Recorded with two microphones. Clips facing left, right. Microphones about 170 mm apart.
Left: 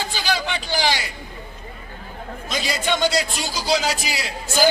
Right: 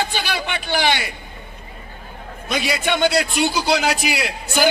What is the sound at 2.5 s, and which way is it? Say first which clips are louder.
A man's voice: right 3 dB; 65° right (ahead or behind).